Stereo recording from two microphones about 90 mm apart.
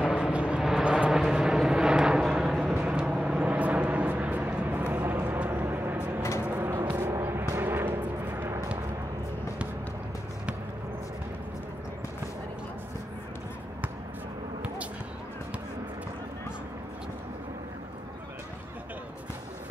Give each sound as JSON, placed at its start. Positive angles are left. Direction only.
{"t": 0.0, "sound": "vehicle", "side_deg": -5}
{"t": 7.0, "sound": "artillery fire", "side_deg": -25}